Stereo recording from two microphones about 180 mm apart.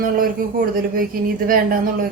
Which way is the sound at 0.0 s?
50° right (ahead or behind).